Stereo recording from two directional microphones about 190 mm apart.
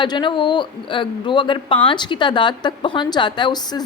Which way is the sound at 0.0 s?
25° left (ahead or behind).